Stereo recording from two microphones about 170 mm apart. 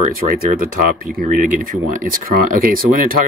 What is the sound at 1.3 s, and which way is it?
Speech, 50° right (ahead or behind).